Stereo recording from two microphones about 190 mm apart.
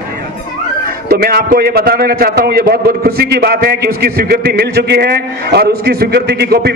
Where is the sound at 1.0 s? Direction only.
50° right (ahead or behind).